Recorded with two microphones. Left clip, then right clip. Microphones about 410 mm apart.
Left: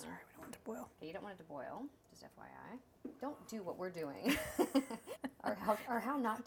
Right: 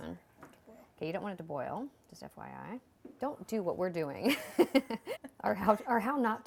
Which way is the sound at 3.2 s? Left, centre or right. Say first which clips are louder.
Right 11 dB; right.